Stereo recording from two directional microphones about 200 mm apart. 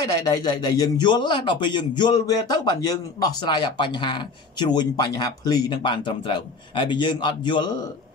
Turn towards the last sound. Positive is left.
turn(degrees=20)  # may be behind; listen again after turning